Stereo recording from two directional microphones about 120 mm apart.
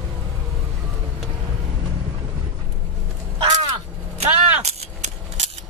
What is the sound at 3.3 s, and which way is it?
Crow, 35° right (ahead or behind).